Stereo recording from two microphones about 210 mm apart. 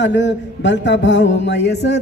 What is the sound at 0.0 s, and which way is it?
A man's voice, 60° left (ahead or behind).